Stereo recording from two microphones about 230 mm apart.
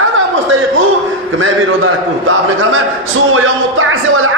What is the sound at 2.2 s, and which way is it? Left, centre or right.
Speech, right.